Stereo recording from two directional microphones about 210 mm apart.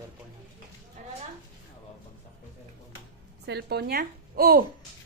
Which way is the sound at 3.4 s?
50° right (ahead or behind).